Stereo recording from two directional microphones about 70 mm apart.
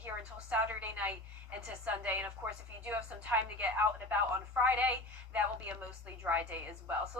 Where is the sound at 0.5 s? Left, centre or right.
Right.